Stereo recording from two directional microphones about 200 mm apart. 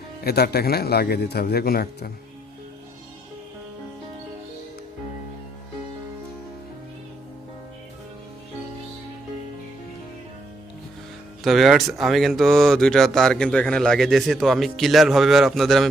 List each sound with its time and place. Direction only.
0.3 s a man's voice: 50° left (ahead or behind)
11.4 s speech: centre (ahead or behind)